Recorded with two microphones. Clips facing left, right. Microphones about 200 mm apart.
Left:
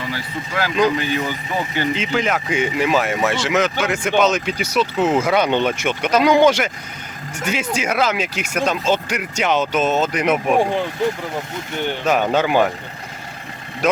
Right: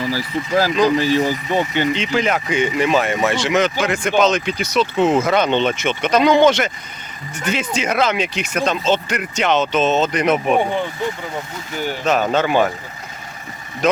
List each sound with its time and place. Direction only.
0.1 s speech: 35° right (ahead or behind)
1.9 s speech: centre (ahead or behind)
12.3 s speech: 15° left (ahead or behind)